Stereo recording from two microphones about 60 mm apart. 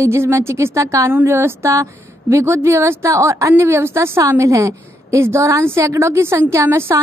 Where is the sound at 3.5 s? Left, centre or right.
Right.